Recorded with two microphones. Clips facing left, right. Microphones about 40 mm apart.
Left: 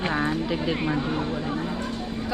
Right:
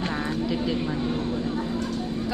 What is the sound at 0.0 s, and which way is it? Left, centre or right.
Speech, left.